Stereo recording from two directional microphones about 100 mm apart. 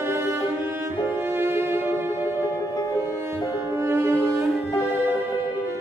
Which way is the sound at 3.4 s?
25° right (ahead or behind).